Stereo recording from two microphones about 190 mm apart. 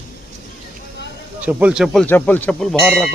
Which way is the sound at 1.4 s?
5° right (ahead or behind).